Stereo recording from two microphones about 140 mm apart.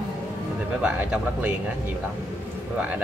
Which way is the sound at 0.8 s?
10° right (ahead or behind).